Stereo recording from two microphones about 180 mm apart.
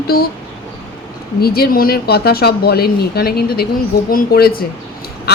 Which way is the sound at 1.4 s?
60° left (ahead or behind).